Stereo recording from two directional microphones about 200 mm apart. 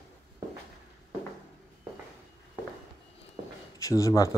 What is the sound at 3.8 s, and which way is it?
Speech, 15° left (ahead or behind).